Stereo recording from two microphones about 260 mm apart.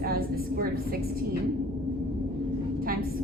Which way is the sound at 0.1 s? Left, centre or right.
Right.